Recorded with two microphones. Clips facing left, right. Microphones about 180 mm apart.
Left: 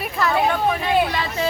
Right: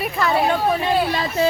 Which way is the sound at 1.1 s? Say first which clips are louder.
Right 4 dB; 35° right (ahead or behind).